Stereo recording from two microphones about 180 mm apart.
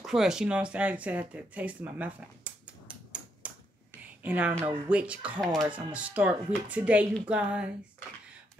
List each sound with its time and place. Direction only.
0.0 s speech: centre (ahead or behind)
5.6 s speech: 25° right (ahead or behind)
5.9 s a woman's voice: 10° right (ahead or behind)